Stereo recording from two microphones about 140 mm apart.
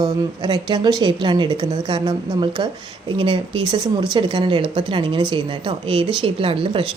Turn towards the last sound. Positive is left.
turn(degrees=-40)  # may be behind; listen again after turning